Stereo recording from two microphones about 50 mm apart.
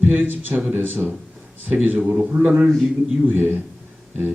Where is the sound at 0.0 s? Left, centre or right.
Right.